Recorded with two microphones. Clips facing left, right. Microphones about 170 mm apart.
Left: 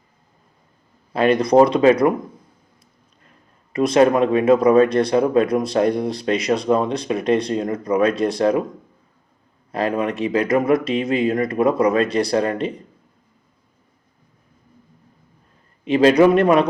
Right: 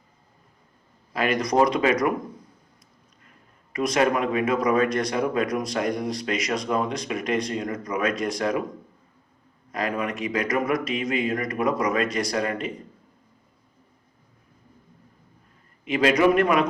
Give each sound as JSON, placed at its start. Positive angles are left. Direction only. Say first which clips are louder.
{"t": 1.1, "sound": "speech", "louder": "left 8 dB", "side_deg": 30}
{"t": 3.7, "sound": "speech", "louder": "left 7 dB", "side_deg": 30}
{"t": 9.7, "sound": "a man's voice", "louder": "left 6 dB", "side_deg": 30}
{"t": 15.8, "sound": "a man's voice", "louder": "left 7 dB", "side_deg": 30}